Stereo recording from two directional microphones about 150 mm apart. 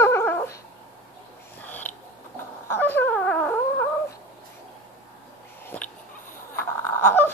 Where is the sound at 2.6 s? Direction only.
15° left (ahead or behind).